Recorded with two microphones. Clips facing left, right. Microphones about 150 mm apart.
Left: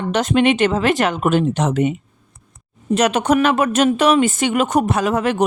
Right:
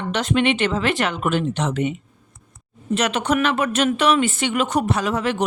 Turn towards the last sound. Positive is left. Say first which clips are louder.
# left 4 dB
turn(degrees=45)  # may be behind; listen again after turning